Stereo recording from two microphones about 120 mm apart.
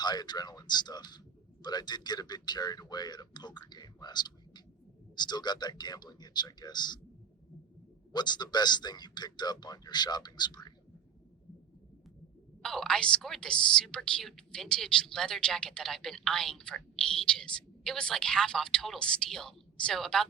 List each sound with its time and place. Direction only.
0.0 s a man's voice: 35° left (ahead or behind)
8.1 s a man's voice: 35° left (ahead or behind)
12.6 s a woman's voice: 5° left (ahead or behind)